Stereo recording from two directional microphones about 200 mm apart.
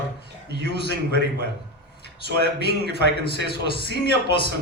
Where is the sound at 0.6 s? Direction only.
55° right (ahead or behind).